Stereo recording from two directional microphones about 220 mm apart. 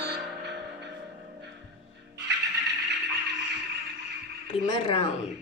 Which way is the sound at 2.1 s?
50° right (ahead or behind).